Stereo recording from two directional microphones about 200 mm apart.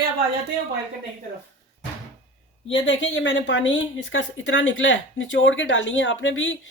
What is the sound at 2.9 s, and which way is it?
Speech, 65° left (ahead or behind).